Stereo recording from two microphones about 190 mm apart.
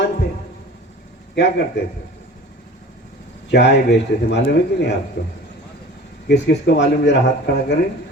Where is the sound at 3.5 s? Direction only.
65° left (ahead or behind).